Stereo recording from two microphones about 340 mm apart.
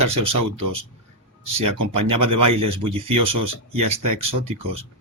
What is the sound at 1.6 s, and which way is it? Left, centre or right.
Speech, right.